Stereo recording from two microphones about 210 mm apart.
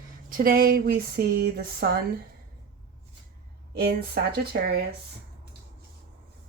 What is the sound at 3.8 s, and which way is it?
Speech, 50° right (ahead or behind).